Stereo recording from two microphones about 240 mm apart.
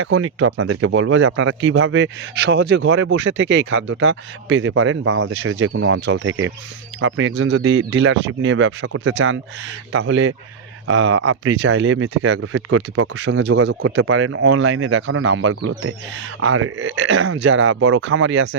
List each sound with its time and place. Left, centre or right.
0.0 s speech: right